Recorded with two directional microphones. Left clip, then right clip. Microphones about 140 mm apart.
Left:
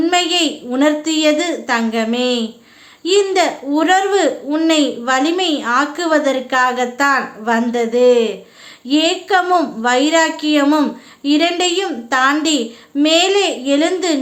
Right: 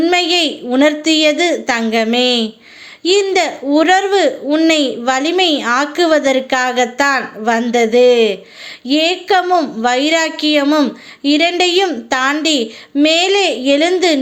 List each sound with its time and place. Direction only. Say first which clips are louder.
0.0 s a woman's voice: right 2 dB; 25° right (ahead or behind)